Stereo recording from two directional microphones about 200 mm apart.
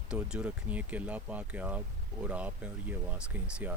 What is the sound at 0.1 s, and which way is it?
Speech, 5° right (ahead or behind).